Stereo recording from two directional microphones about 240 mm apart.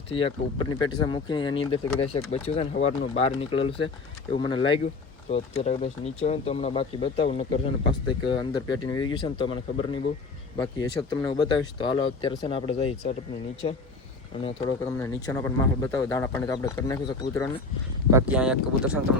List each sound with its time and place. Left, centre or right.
0.1 s speech: left
14.3 s speech: left
18.1 s speech: centre